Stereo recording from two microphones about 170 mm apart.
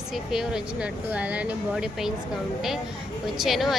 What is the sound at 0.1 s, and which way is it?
A woman's voice, centre (ahead or behind).